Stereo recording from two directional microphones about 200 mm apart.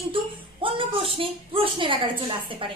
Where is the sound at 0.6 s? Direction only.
25° right (ahead or behind).